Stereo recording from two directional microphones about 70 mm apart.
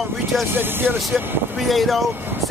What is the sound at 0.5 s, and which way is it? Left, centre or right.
Speech, right.